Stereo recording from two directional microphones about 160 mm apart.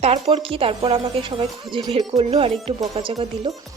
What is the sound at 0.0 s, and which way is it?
A woman's voice, 40° right (ahead or behind).